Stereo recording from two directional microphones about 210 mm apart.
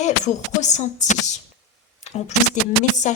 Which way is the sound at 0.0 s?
35° left (ahead or behind).